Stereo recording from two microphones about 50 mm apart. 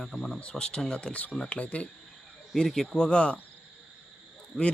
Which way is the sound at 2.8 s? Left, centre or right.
Centre.